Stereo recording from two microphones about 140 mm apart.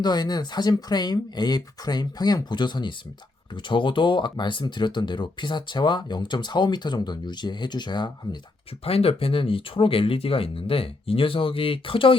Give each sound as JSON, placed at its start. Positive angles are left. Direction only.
{"t": 0.0, "sound": "speech", "side_deg": 30}
{"t": 8.8, "sound": "speech", "side_deg": 45}